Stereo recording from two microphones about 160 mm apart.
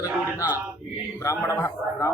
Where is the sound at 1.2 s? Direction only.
20° left (ahead or behind).